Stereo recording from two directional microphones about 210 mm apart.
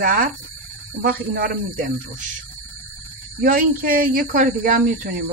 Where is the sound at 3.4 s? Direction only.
45° right (ahead or behind).